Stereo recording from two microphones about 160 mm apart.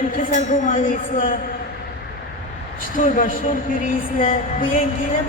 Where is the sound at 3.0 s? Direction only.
60° left (ahead or behind).